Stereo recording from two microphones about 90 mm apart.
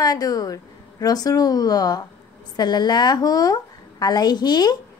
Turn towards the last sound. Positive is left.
turn(degrees=50)  # may be behind; listen again after turning